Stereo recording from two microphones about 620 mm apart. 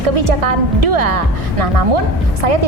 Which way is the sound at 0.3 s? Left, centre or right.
Right.